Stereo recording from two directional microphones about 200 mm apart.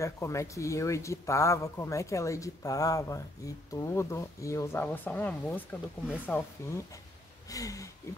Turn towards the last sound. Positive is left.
turn(degrees=15)  # may be behind; listen again after turning